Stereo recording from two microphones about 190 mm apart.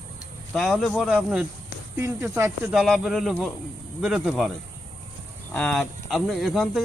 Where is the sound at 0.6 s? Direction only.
Centre (ahead or behind).